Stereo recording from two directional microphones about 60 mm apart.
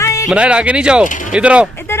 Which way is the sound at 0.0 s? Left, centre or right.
Left.